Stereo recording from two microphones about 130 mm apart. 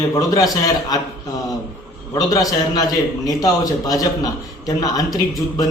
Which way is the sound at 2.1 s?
25° left (ahead or behind).